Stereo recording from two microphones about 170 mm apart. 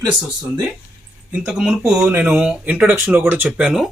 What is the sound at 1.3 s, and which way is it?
Speech, 5° right (ahead or behind).